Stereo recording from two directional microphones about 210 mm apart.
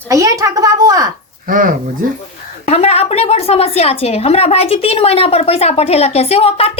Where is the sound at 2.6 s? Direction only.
30° left (ahead or behind).